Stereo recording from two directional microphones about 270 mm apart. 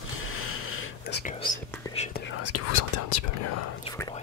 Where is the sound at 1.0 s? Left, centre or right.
Left.